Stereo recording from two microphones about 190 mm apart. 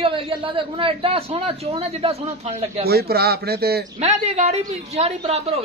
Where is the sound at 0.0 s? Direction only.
25° right (ahead or behind).